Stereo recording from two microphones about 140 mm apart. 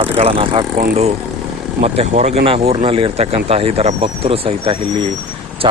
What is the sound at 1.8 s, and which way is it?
Speech, 50° right (ahead or behind).